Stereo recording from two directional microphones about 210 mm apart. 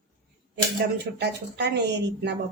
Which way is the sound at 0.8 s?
55° right (ahead or behind).